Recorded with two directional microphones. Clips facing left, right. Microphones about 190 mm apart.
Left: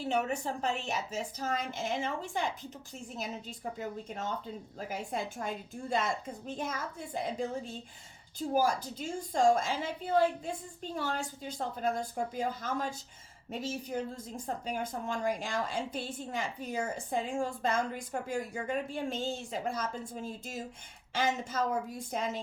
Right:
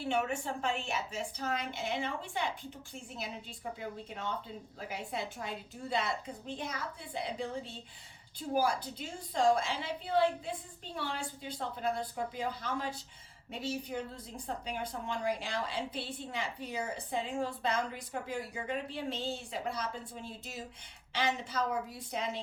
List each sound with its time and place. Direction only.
0.0 s a woman's voice: 40° left (ahead or behind)
3.8 s a woman's voice: 45° left (ahead or behind)